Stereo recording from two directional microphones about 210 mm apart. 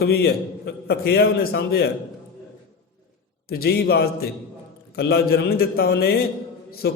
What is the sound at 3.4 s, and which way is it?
A man's voice, 45° left (ahead or behind).